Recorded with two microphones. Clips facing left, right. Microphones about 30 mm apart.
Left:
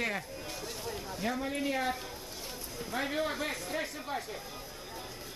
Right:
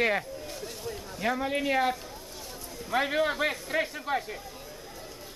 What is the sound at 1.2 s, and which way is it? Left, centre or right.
Speech, right.